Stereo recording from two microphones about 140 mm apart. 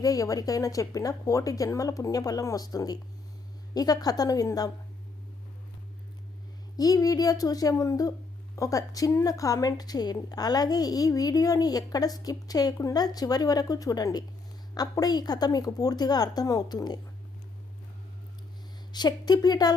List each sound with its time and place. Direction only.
0.0 s a woman's voice: 25° left (ahead or behind)
6.7 s a woman's voice: 25° left (ahead or behind)
18.9 s a woman's voice: 30° left (ahead or behind)